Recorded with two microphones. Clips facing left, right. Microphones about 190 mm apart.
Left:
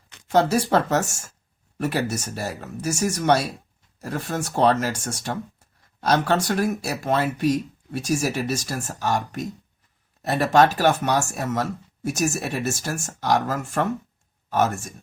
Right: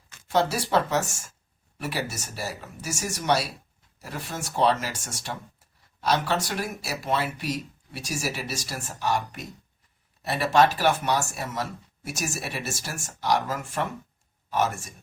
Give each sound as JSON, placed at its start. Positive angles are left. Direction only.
{"t": 0.3, "sound": "speech", "side_deg": 50}